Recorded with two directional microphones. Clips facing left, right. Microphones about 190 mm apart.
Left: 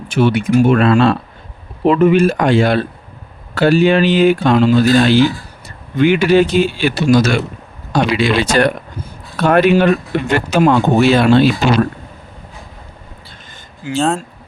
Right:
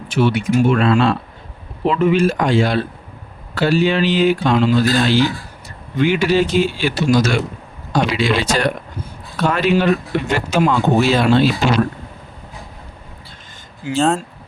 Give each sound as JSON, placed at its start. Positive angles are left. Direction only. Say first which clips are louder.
{"t": 0.1, "sound": "speech", "louder": "left 3 dB", "side_deg": 55}
{"t": 13.9, "sound": "speech", "louder": "even", "side_deg": 0}